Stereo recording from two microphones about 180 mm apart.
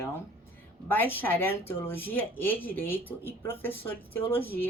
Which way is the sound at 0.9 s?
10° left (ahead or behind).